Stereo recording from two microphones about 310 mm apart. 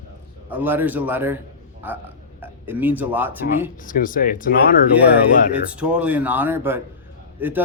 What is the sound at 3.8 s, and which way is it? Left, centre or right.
Speech, left.